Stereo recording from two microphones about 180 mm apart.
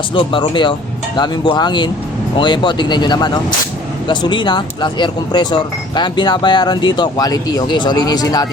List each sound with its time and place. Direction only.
0.1 s speech: 30° left (ahead or behind)